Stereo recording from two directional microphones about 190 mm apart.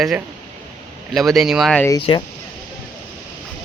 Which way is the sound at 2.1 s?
30° left (ahead or behind).